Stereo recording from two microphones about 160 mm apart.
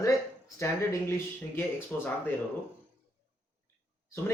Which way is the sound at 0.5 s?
20° left (ahead or behind).